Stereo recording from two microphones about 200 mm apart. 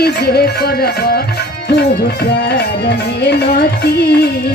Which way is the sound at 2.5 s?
55° left (ahead or behind).